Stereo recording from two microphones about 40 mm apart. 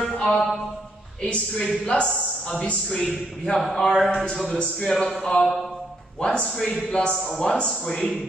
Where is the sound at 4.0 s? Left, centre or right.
Centre.